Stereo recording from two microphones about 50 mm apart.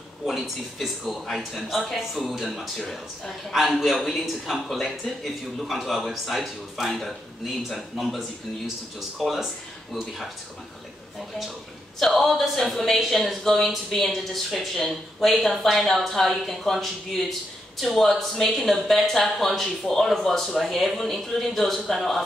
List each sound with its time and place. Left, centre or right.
0.3 s a woman's voice: centre
9.2 s a woman's voice: centre
12.0 s a woman's voice: centre